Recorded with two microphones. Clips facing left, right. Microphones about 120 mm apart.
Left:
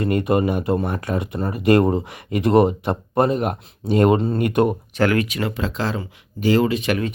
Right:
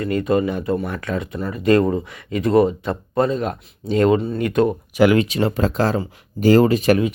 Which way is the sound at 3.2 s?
55° left (ahead or behind).